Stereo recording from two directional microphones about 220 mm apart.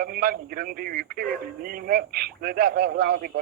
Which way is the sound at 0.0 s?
40° right (ahead or behind).